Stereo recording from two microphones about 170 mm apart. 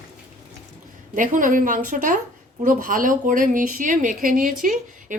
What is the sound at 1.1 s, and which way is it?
A woman's voice, 50° right (ahead or behind).